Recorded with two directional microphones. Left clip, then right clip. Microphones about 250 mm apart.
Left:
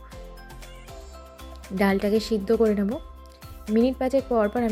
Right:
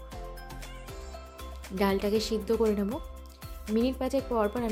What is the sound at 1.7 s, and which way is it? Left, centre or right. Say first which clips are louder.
Speech: left 4 dB; centre.